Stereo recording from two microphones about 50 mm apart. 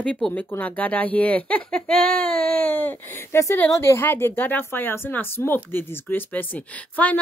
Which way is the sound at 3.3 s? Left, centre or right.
Left.